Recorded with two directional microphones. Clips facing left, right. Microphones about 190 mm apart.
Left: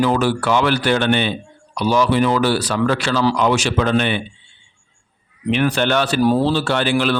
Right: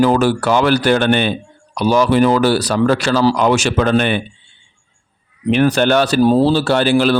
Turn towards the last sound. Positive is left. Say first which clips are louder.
# right 5 dB
turn(degrees=-35)  # may be behind; listen again after turning